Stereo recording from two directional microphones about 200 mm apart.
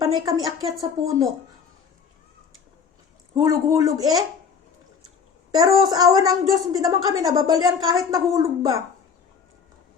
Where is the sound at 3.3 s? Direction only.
15° right (ahead or behind).